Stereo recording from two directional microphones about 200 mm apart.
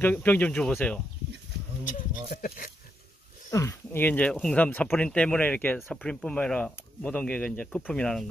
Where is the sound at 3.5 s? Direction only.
15° left (ahead or behind).